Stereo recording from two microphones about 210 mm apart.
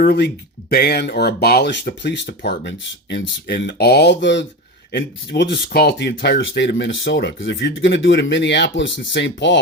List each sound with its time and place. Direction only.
0.0 s speech: 50° left (ahead or behind)